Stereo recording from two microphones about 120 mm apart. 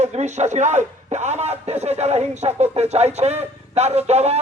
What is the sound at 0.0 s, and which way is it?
Speech, 70° right (ahead or behind).